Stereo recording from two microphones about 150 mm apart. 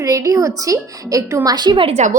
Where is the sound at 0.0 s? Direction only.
20° right (ahead or behind).